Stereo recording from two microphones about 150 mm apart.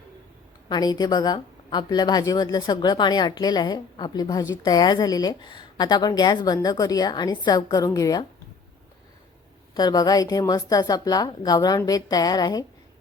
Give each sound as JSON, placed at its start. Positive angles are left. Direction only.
{"t": 0.7, "sound": "a woman's voice", "side_deg": 25}
{"t": 9.7, "sound": "a woman's voice", "side_deg": 25}